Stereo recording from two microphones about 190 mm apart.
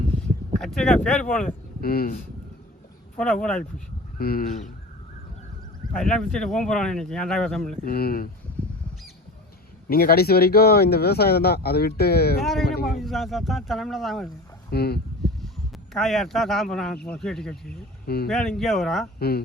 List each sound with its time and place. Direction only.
0.6 s speech: 5° left (ahead or behind)
1.5 s speech: 50° left (ahead or behind)
3.2 s speech: 5° left (ahead or behind)
4.2 s speech: 50° left (ahead or behind)
6.0 s speech: 5° left (ahead or behind)
7.9 s speech: 50° left (ahead or behind)
9.9 s speech: 55° left (ahead or behind)
12.4 s speech: centre (ahead or behind)
14.7 s speech: 55° left (ahead or behind)
15.9 s speech: centre (ahead or behind)
18.0 s speech: 55° left (ahead or behind)
18.3 s speech: 5° left (ahead or behind)